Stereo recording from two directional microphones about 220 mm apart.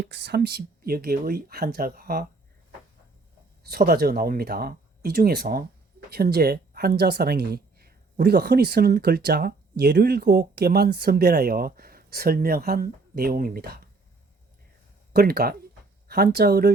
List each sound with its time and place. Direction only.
0.0 s speech: 50° right (ahead or behind)
3.6 s speech: 45° right (ahead or behind)
15.1 s speech: 45° right (ahead or behind)